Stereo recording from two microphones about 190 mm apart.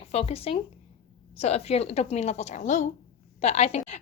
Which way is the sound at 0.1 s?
35° left (ahead or behind).